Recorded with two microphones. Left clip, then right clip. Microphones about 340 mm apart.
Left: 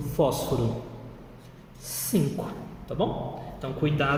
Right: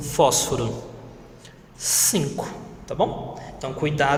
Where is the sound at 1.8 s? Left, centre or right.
Right.